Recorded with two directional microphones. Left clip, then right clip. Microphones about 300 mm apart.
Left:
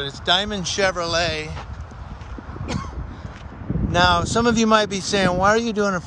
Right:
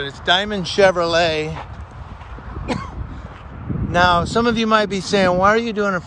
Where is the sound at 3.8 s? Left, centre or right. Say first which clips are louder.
Right 2 dB; centre.